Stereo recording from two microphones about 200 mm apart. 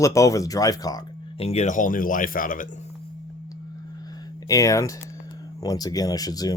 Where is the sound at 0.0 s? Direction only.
15° left (ahead or behind).